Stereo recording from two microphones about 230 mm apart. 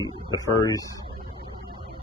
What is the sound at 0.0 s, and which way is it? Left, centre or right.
Speech, centre.